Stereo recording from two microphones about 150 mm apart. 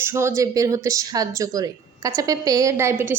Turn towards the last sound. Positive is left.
turn(degrees=-15)  # may be behind; listen again after turning